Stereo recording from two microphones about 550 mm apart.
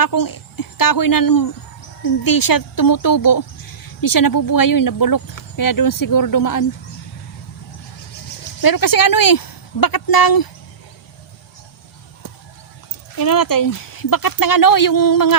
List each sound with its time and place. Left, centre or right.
0.0 s speech: left
8.6 s speech: left
13.1 s speech: left